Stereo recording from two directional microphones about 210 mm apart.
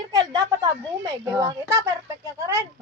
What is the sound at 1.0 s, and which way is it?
Speech, 15° right (ahead or behind).